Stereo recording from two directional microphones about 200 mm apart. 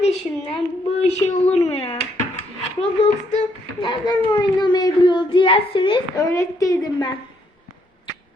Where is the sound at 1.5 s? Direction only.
30° left (ahead or behind).